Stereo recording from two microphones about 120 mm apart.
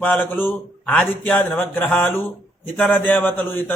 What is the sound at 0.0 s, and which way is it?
A man's voice, 15° left (ahead or behind).